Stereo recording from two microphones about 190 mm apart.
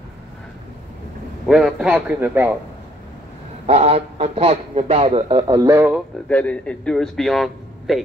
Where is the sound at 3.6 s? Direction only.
35° right (ahead or behind); by 6.0 s 10° right (ahead or behind).